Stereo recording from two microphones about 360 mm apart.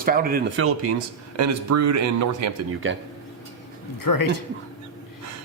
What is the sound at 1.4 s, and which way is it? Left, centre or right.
Speech, right.